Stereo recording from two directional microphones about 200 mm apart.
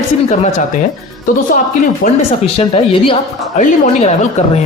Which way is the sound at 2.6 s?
25° left (ahead or behind).